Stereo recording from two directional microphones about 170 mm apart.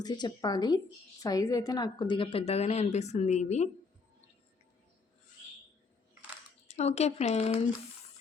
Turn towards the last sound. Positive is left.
turn(degrees=40)  # may be behind; listen again after turning